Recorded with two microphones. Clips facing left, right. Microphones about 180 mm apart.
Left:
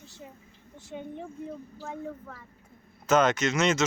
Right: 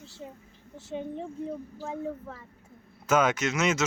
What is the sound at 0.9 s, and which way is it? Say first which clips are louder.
Speech: right 4 dB; 30° right (ahead or behind).